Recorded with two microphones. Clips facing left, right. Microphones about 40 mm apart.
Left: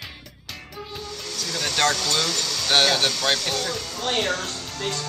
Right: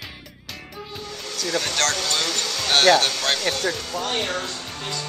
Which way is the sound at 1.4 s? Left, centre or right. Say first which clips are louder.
Even; centre.